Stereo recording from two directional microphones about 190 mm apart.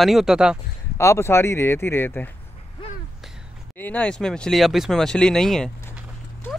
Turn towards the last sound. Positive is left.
turn(degrees=0)  # may be behind; listen again after turning